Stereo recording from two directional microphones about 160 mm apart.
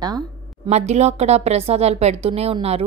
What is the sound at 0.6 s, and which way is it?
A woman's voice, 45° right (ahead or behind).